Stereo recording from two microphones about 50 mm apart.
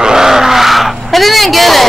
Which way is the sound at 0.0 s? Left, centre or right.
Centre.